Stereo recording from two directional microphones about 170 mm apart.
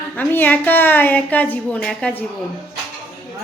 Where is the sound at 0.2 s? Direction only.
10° left (ahead or behind).